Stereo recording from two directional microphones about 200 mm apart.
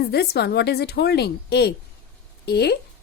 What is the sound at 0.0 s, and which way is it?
A woman's voice, 50° left (ahead or behind).